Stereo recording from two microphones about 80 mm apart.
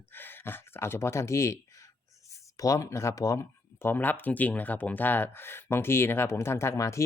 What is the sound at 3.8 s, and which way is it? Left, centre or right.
Speech, left.